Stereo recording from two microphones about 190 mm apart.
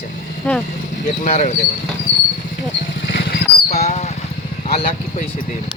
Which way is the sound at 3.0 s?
60° left (ahead or behind).